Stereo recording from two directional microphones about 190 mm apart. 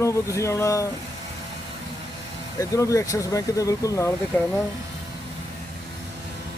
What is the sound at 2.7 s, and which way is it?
Speech, 15° left (ahead or behind).